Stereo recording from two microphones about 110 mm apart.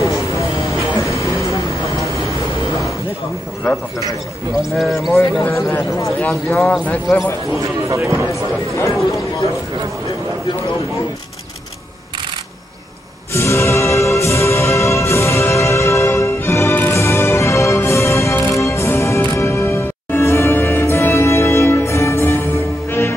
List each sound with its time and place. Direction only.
1.1 s vehicle: 30° left (ahead or behind)
4.7 s speech: centre (ahead or behind)
5.2 s a man's voice: 25° left (ahead or behind)
6.2 s speech: 10° left (ahead or behind)
7.9 s speech: 25° right (ahead or behind)
8.3 s a man's voice: 30° left (ahead or behind)
13.3 s music: 25° left (ahead or behind)